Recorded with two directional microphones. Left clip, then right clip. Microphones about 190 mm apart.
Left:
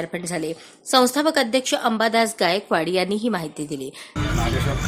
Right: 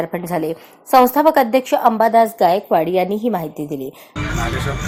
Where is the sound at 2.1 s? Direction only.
Centre (ahead or behind).